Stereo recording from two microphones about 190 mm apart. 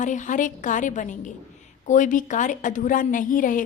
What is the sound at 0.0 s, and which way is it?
A woman's voice, 40° left (ahead or behind).